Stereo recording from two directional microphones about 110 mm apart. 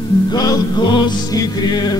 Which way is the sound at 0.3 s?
40° left (ahead or behind).